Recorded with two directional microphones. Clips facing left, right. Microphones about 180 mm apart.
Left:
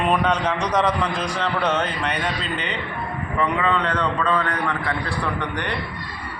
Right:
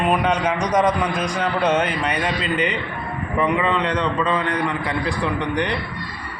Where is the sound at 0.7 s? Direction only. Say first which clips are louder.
Right 3 dB; 20° right (ahead or behind).